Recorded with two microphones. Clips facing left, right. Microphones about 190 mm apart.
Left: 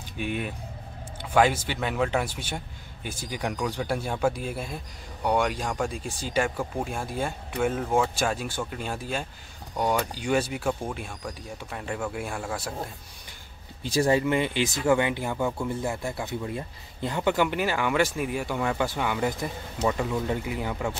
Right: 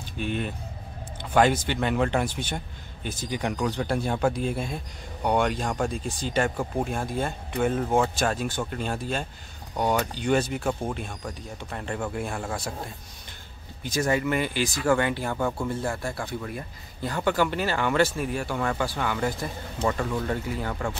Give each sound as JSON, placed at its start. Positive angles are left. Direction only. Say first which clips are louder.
{"t": 0.2, "sound": "speech", "louder": "right 1 dB", "side_deg": 10}
{"t": 13.8, "sound": "speech", "louder": "left 2 dB", "side_deg": 30}